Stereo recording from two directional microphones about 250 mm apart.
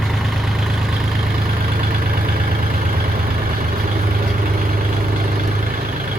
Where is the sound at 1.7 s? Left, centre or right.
Right.